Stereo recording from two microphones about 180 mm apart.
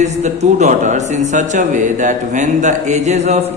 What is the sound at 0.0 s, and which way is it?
Speech, 40° right (ahead or behind).